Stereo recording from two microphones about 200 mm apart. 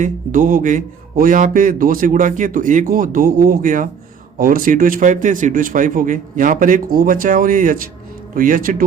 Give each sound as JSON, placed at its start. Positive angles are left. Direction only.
{"t": 0.0, "sound": "speech", "side_deg": -40}